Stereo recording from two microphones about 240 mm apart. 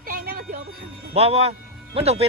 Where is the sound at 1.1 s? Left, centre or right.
Right.